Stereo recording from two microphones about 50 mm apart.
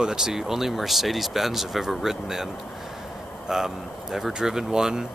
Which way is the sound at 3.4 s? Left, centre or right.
Centre.